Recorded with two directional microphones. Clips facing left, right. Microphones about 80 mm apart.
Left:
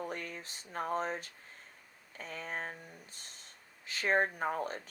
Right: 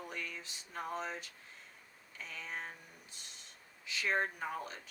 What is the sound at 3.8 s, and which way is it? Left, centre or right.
Speech, left.